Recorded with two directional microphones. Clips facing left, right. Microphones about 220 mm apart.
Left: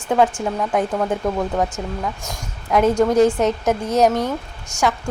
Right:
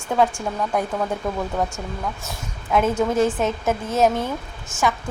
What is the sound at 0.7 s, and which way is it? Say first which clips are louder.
Speech: left 4 dB; 20° left (ahead or behind).